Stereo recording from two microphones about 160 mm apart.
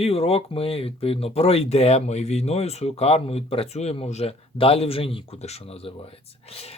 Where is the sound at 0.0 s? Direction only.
35° left (ahead or behind).